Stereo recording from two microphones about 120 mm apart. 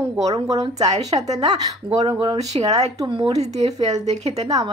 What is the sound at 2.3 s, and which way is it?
Speech, 65° right (ahead or behind).